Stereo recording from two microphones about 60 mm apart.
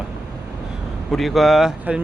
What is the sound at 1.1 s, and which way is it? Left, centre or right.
Speech, centre.